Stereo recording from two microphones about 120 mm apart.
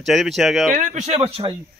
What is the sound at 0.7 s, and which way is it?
Speech, 90° right.